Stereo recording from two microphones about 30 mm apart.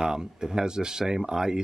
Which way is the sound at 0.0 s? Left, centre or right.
Right.